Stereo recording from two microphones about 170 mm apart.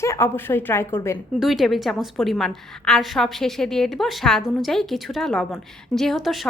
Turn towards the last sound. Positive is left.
turn(degrees=0)  # may be behind; listen again after turning